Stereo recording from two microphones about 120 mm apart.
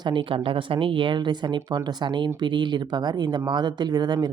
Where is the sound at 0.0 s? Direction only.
40° right (ahead or behind).